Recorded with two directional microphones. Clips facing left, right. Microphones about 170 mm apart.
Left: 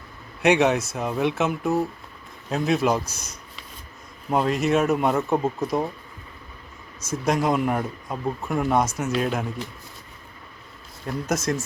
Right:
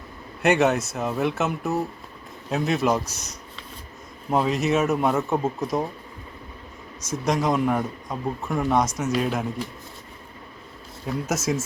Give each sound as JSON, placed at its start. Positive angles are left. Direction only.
{"t": 0.4, "sound": "speech", "side_deg": 0}
{"t": 7.1, "sound": "speech", "side_deg": 0}
{"t": 11.0, "sound": "speech", "side_deg": -5}